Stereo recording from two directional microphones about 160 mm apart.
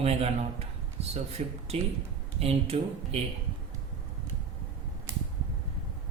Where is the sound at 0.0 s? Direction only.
40° right (ahead or behind).